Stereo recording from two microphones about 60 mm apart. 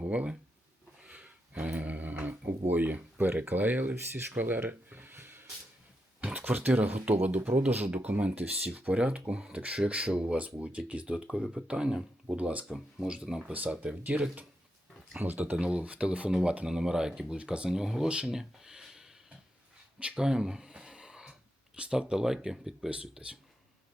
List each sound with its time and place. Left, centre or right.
0.0 s speech: right
3.9 s speech: right
4.4 s a sound: right
6.1 s speech: right
13.8 s speech: right
15.5 s speech: centre
17.7 s speech: centre
20.0 s a sound: centre
21.8 s speech: centre
22.9 s speech: centre